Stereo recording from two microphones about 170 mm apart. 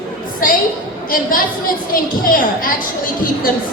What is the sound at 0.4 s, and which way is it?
Speech, 55° left (ahead or behind).